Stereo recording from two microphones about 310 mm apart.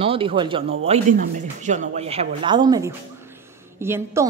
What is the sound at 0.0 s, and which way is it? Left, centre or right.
A woman's voice, centre.